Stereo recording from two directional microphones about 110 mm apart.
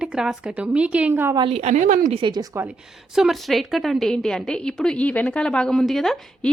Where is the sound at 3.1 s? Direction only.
5° right (ahead or behind).